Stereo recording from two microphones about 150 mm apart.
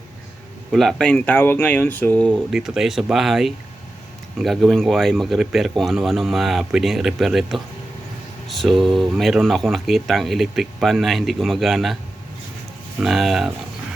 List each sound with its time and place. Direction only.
0.7 s speech: centre (ahead or behind)
2.5 s speech: 5° right (ahead or behind)
13.0 s speech: centre (ahead or behind)